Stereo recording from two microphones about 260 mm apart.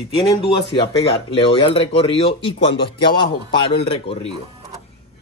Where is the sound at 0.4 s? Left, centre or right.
Centre.